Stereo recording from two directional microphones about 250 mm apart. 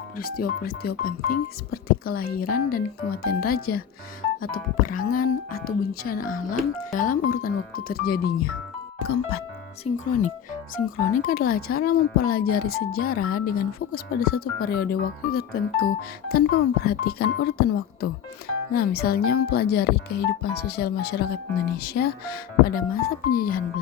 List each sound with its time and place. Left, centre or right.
0.2 s speech: left
9.8 s speech: left